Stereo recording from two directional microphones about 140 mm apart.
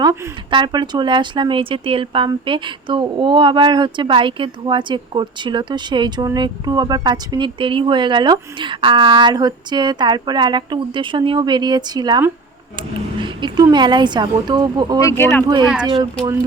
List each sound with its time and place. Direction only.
0.5 s speech: 35° right (ahead or behind)
13.2 s speech: 30° right (ahead or behind)
15.0 s speech: 20° left (ahead or behind)
15.6 s speech: 5° right (ahead or behind)